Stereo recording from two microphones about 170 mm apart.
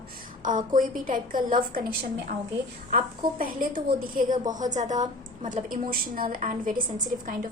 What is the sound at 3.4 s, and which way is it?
A woman's voice, 55° right (ahead or behind).